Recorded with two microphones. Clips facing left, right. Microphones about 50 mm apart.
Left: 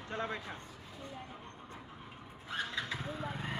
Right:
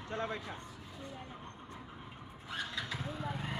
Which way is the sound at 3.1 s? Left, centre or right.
Left.